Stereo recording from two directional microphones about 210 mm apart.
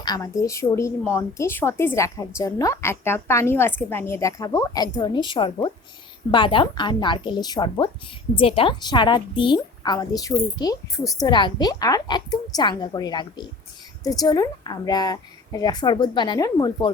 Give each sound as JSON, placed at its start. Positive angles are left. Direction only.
{"t": 0.0, "sound": "a woman's voice", "side_deg": 15}